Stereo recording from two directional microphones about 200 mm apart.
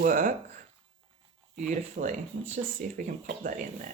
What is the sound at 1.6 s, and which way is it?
Speech, 40° right (ahead or behind).